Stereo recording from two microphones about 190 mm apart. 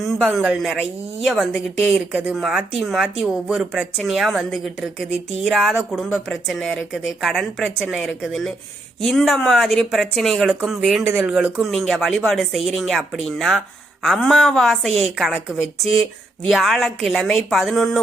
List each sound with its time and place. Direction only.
0.0 s a woman's voice: centre (ahead or behind)
5.1 s speech: 35° right (ahead or behind)
5.5 s a woman's voice: centre (ahead or behind)